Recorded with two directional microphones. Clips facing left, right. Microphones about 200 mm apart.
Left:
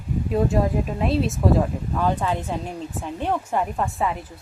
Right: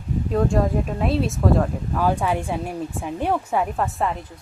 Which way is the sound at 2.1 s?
10° right (ahead or behind).